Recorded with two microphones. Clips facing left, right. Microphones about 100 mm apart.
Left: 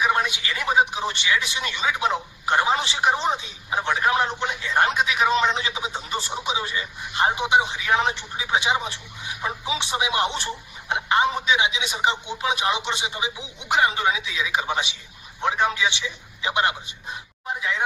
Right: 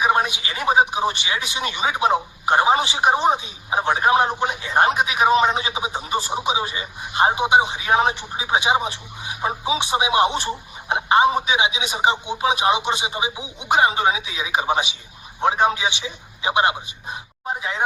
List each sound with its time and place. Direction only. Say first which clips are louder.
0.0 s a man's voice: right 3 dB; 20° right (ahead or behind)